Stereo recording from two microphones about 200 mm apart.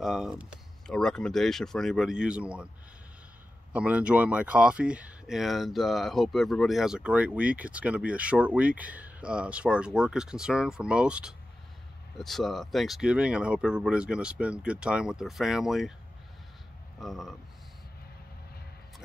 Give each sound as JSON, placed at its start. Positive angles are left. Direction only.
{"t": 0.0, "sound": "speech", "side_deg": -5}
{"t": 3.7, "sound": "speech", "side_deg": -5}
{"t": 17.0, "sound": "speech", "side_deg": 0}